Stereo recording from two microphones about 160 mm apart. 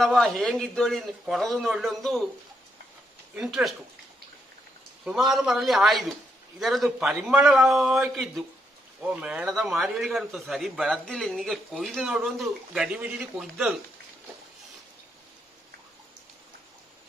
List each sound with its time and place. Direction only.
0.0 s speech: centre (ahead or behind)
3.3 s speech: 5° right (ahead or behind)
5.0 s speech: centre (ahead or behind)